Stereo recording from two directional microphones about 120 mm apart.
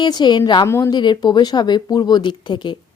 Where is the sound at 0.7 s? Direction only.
20° left (ahead or behind).